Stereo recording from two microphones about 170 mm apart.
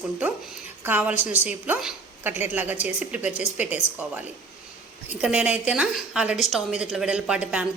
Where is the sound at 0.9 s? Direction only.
10° right (ahead or behind).